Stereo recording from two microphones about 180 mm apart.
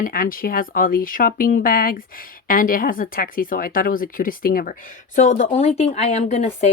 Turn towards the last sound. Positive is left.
turn(degrees=35)  # may be behind; listen again after turning